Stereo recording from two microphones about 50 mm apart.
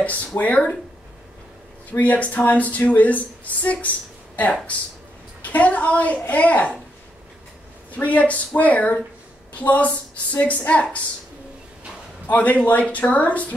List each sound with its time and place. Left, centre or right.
0.0 s a woman's voice: left
1.9 s speech: left
5.4 s a woman's voice: left
7.9 s a woman's voice: left
12.3 s speech: left